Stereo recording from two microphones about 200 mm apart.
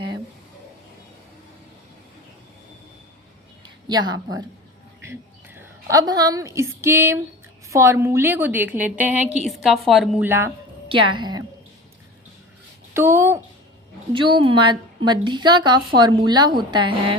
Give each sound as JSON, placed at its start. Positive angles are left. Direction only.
{"t": 3.8, "sound": "a woman's voice", "side_deg": -20}
{"t": 5.5, "sound": "a woman's voice", "side_deg": -15}
{"t": 10.8, "sound": "a woman's voice", "side_deg": -25}
{"t": 12.9, "sound": "a woman's voice", "side_deg": -15}
{"t": 14.1, "sound": "a woman's voice", "side_deg": -25}